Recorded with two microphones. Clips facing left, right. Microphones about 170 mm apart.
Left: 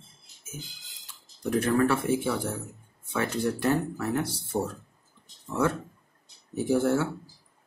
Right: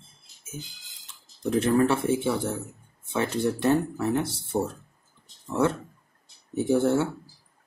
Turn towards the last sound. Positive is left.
turn(degrees=-25)  # may be behind; listen again after turning